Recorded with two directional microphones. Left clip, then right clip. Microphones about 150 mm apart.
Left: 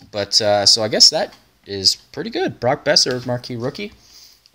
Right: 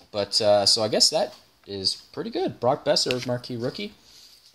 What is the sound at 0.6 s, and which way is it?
Speech, 35° left (ahead or behind).